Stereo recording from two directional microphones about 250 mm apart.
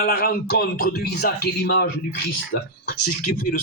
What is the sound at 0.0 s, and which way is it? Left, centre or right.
Speech, left.